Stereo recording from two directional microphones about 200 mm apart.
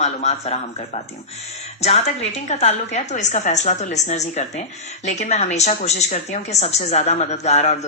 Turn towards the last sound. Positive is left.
turn(degrees=35)  # may be behind; listen again after turning